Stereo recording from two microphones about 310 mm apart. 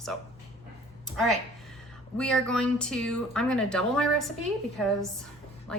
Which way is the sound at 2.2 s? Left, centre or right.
Centre.